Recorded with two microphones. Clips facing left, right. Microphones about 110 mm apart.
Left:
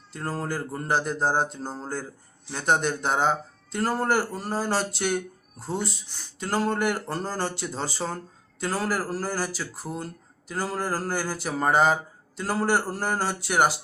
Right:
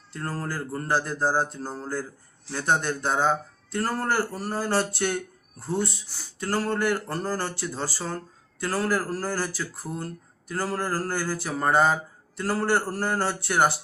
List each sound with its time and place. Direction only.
0.1 s speech: 20° left (ahead or behind)